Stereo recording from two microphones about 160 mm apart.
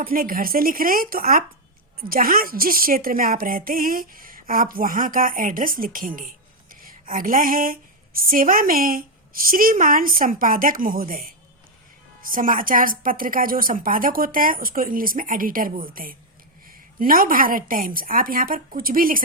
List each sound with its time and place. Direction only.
0.0 s a woman's voice: 65° right (ahead or behind)